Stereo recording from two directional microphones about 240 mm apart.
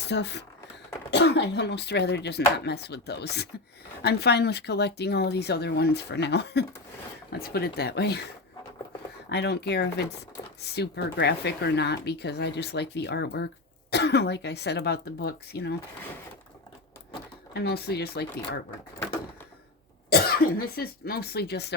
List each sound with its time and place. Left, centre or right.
0.0 s speech: left
9.3 s speech: left
17.5 s speech: left
20.1 s speech: left